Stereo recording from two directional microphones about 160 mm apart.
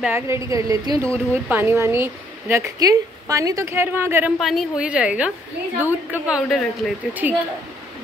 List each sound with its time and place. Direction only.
0.0 s a woman's voice: 15° right (ahead or behind)
4.4 s a woman's voice: centre (ahead or behind)